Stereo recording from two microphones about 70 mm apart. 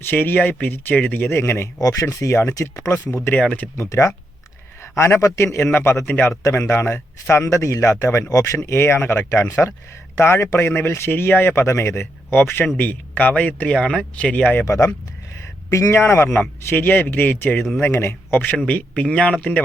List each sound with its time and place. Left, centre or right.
0.0 s speech: left
1.3 s speech: left
1.8 s speech: left
2.3 s speech: left
2.6 s a man's voice: left
2.9 s a man's voice: left
7.4 s a man's voice: left
9.3 s a man's voice: left
14.6 s a man's voice: left; by 19.6 s centre